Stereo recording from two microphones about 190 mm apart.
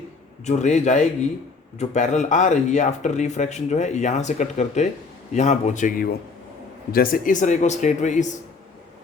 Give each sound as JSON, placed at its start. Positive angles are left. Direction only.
{"t": 0.4, "sound": "speech", "side_deg": 40}